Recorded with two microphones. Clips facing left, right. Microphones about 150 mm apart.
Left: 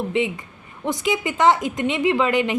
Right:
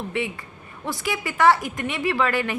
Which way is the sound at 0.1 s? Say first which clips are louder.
Left 5 dB; 20° left (ahead or behind).